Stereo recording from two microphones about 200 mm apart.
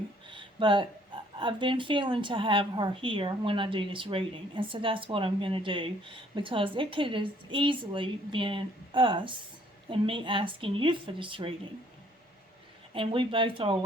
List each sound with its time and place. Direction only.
0.3 s speech: 25° right (ahead or behind)
12.9 s speech: 25° right (ahead or behind)